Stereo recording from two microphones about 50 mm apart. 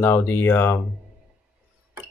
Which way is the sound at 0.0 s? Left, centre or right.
Left.